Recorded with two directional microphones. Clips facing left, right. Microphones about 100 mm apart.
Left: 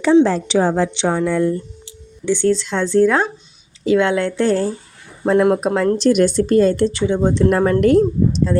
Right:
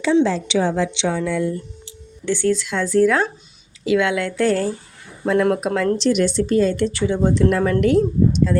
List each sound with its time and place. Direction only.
0.0 s a woman's voice: 50° left (ahead or behind)
2.2 s a woman's voice: 20° left (ahead or behind)
2.5 s a woman's voice: 30° left (ahead or behind)
6.0 s a woman's voice: 45° left (ahead or behind)
6.8 s a woman's voice: 25° left (ahead or behind)
7.5 s speech: 40° left (ahead or behind)